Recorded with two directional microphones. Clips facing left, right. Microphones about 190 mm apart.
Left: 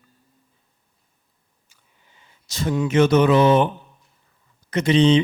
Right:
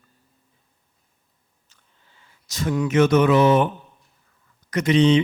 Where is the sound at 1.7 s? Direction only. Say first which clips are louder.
Left 1 dB; 15° left (ahead or behind); by 3.7 s 30° left (ahead or behind).